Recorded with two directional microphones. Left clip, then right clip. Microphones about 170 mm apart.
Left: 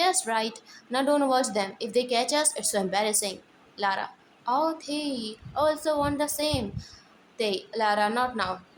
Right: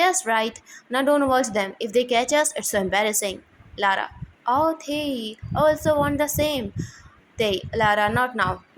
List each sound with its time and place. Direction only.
0.0 s a woman's voice: 20° right (ahead or behind)